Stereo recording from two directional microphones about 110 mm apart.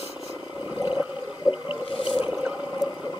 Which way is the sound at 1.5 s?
50° left (ahead or behind).